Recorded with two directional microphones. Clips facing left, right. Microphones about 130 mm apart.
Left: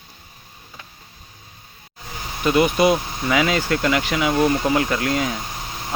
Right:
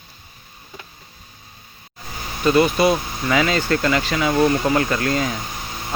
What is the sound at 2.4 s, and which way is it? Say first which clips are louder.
Speech: right 1 dB; 15° left (ahead or behind).